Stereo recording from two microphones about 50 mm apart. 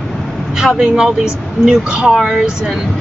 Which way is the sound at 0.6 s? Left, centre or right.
Centre.